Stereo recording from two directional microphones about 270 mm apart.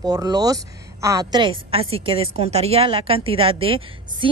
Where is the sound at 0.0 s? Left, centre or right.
Centre.